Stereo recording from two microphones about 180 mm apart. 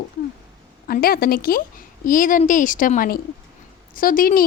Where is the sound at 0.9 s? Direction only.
55° left (ahead or behind).